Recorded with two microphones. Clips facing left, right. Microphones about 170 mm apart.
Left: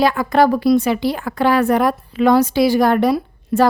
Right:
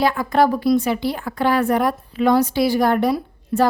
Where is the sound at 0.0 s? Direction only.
90° left.